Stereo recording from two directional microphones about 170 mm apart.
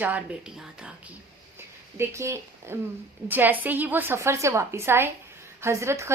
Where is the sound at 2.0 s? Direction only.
15° right (ahead or behind).